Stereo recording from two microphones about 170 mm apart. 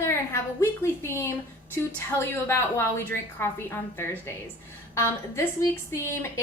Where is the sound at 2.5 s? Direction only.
15° left (ahead or behind).